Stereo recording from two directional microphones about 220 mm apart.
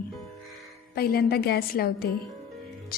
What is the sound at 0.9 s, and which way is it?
A woman's voice, 45° left (ahead or behind).